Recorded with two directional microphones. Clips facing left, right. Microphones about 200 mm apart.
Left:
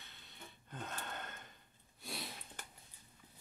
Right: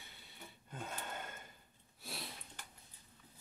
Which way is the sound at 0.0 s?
10° right (ahead or behind).